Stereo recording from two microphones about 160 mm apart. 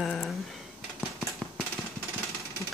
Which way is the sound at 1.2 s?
Centre (ahead or behind).